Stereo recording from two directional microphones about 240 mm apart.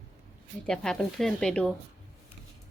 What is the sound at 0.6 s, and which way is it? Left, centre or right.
A woman's voice, centre.